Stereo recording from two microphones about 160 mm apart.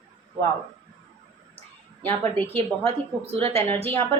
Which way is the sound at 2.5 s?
40° right (ahead or behind).